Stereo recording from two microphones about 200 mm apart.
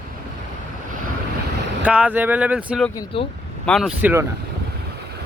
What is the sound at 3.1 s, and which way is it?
Speech, 25° left (ahead or behind).